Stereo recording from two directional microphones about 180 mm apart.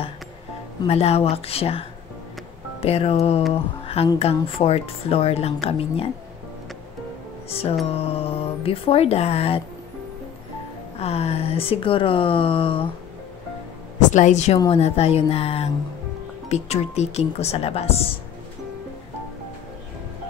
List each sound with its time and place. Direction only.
0.8 s speech: 35° left (ahead or behind)
7.4 s music: 35° left (ahead or behind)
7.8 s speech: 30° left (ahead or behind)
11.0 s speech: 35° left (ahead or behind)
14.1 s speech: 40° left (ahead or behind)